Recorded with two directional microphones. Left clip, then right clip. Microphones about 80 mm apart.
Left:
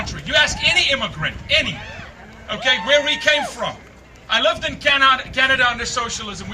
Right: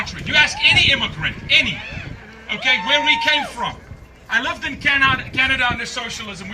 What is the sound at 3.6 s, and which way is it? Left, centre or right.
Speech, left.